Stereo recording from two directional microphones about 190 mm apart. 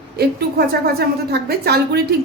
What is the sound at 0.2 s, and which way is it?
A woman's voice, 55° right (ahead or behind).